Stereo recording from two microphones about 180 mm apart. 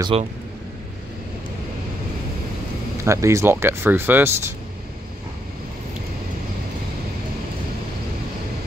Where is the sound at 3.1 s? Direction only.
15° right (ahead or behind).